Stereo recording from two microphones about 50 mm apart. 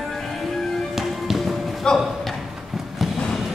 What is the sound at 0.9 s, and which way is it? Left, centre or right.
Music, centre.